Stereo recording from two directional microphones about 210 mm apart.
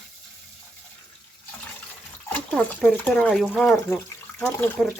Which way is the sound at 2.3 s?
Centre (ahead or behind).